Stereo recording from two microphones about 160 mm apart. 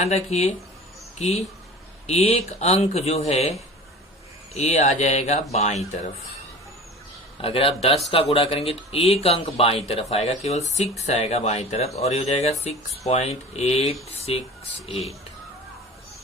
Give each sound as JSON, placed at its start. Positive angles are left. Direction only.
{"t": 0.0, "sound": "speech", "side_deg": 45}
{"t": 4.5, "sound": "speech", "side_deg": 45}
{"t": 7.4, "sound": "speech", "side_deg": 35}